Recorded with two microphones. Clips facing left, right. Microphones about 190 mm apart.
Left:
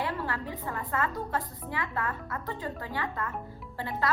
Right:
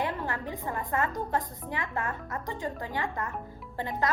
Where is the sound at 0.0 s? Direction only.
20° right (ahead or behind).